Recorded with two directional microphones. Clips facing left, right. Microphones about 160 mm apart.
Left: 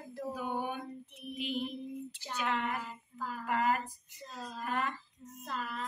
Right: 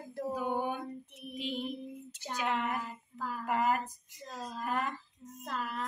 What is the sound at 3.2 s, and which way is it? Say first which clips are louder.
Child singing: right 2 dB; 60° right (ahead or behind).